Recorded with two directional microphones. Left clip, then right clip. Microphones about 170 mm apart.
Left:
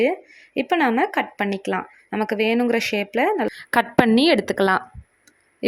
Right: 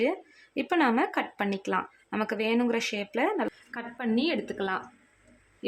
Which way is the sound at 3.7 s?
65° left (ahead or behind).